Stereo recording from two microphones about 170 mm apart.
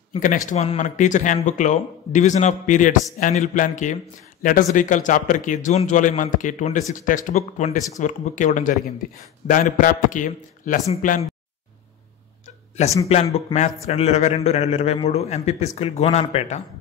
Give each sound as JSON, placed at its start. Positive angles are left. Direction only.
{"t": 0.5, "sound": "speech", "side_deg": 40}
{"t": 13.1, "sound": "speech", "side_deg": 35}